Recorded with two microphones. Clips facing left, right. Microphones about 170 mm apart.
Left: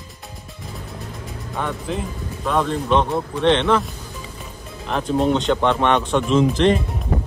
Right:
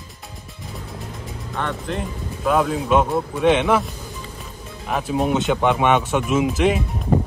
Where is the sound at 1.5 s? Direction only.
5° left (ahead or behind).